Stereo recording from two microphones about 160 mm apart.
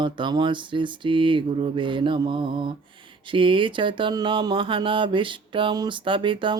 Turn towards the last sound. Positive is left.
turn(degrees=-30)  # may be behind; listen again after turning